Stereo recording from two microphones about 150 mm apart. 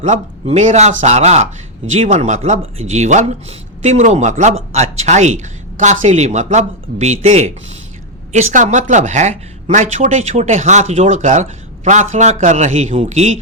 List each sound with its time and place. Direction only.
0.0 s speech: 50° right (ahead or behind)